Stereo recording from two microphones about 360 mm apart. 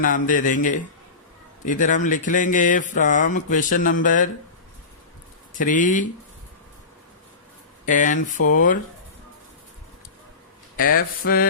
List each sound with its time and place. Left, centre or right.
0.0 s speech: left
5.5 s speech: left
7.9 s speech: left
10.8 s speech: left